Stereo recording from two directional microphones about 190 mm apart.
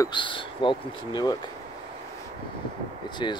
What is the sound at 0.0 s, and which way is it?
Speech, 25° left (ahead or behind).